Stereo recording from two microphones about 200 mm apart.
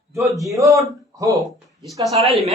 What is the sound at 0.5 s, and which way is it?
Speech, 15° right (ahead or behind).